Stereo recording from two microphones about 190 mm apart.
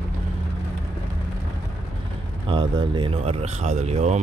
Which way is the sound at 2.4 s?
25° right (ahead or behind).